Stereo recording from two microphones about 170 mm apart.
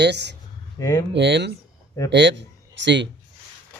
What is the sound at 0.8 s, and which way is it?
Speech, 20° left (ahead or behind).